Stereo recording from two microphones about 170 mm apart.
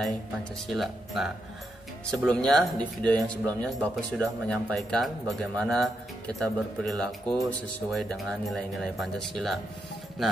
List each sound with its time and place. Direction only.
0.0 s speech: centre (ahead or behind)